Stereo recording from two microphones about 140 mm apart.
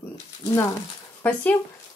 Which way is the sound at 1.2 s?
10° left (ahead or behind).